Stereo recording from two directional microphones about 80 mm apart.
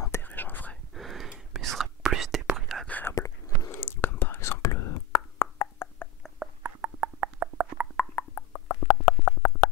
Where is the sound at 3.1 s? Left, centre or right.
Left.